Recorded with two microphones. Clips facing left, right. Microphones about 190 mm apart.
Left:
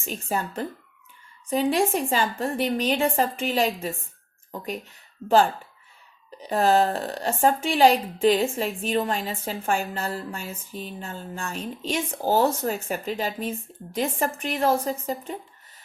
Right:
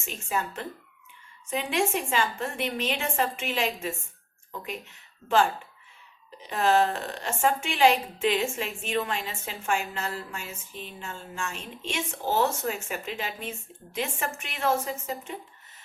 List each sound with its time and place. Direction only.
0.0 s a woman's voice: 35° left (ahead or behind)
6.4 s a woman's voice: 35° left (ahead or behind)